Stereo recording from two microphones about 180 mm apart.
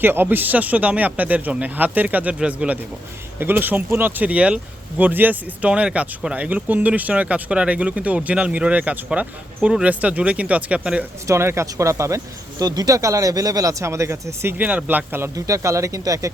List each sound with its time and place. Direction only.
0.0 s speech: 10° right (ahead or behind)